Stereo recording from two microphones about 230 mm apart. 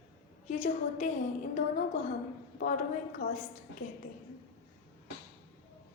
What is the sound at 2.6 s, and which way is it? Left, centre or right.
Speech, left.